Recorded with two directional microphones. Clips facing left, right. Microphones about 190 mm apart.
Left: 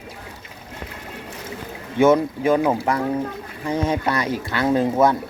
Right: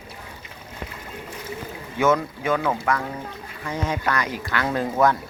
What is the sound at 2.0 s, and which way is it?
Speech, 30° left (ahead or behind).